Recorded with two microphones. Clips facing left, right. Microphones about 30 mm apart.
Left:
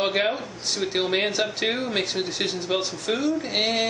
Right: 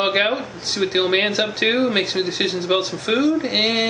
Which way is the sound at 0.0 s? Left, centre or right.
Right.